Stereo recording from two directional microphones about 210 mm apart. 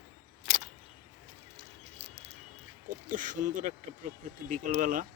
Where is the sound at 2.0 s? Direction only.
30° right (ahead or behind).